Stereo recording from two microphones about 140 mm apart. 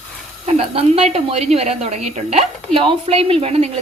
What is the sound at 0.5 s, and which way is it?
A woman's voice, 45° right (ahead or behind).